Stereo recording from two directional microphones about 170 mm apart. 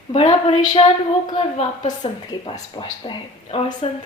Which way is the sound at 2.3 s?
25° left (ahead or behind).